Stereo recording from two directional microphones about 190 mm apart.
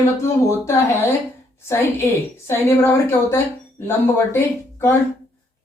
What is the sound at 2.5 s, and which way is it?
A woman's voice, 15° left (ahead or behind).